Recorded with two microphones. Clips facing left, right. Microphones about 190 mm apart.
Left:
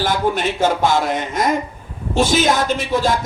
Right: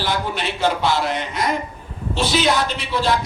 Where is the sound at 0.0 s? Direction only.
45° left (ahead or behind).